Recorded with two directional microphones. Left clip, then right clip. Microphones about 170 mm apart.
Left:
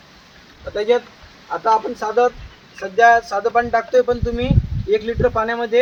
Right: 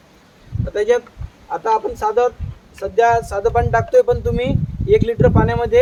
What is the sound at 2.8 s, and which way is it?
Speech, 40° right (ahead or behind).